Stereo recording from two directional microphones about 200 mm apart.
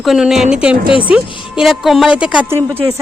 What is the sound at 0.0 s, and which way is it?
A woman's voice, centre (ahead or behind).